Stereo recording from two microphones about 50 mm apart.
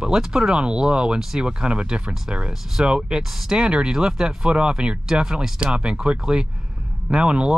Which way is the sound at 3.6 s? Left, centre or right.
Centre.